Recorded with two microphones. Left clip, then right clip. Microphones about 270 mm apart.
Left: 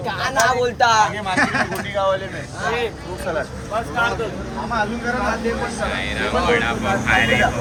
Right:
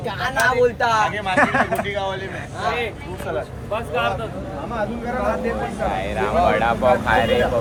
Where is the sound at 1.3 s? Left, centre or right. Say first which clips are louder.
Right 2 dB; right.